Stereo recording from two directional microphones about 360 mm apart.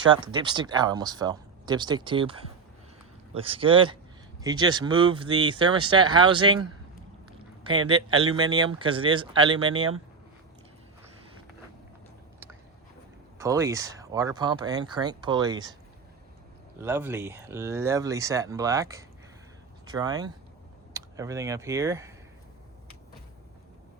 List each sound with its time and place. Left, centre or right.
0.0 s speech: centre
8.0 s speech: right
8.4 s speech: centre
13.4 s speech: centre
16.8 s speech: centre